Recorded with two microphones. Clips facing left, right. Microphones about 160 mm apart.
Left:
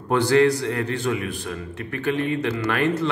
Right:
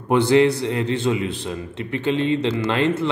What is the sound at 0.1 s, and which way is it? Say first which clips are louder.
A man's voice: right 2 dB; 20° right (ahead or behind).